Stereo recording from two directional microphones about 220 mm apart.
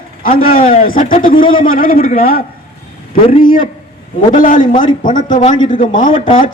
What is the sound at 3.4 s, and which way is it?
A man's voice, 40° left (ahead or behind).